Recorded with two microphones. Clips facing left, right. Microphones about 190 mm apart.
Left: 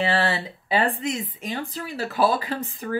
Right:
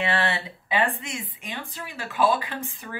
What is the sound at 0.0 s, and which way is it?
Speech, 35° left (ahead or behind).